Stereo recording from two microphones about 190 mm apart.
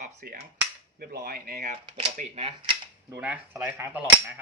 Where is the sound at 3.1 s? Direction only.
10° right (ahead or behind).